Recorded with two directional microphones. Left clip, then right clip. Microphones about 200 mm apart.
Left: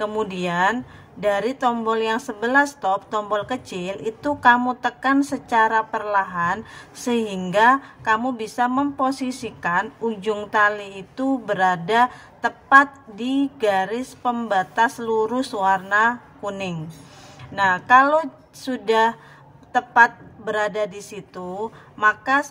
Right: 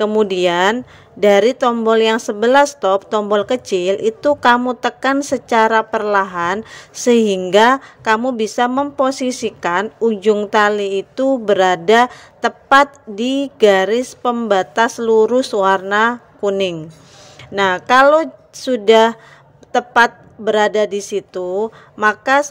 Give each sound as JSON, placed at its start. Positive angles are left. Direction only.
{"t": 0.0, "sound": "a woman's voice", "side_deg": -35}